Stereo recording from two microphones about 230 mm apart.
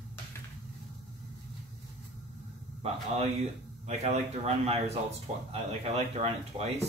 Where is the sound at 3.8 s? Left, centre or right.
Right.